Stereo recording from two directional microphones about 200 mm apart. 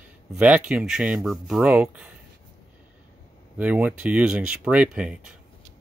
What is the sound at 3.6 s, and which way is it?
Speech, 5° right (ahead or behind).